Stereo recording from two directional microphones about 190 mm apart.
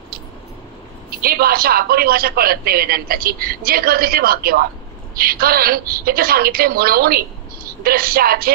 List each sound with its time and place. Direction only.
1.2 s a woman's voice: 55° right (ahead or behind)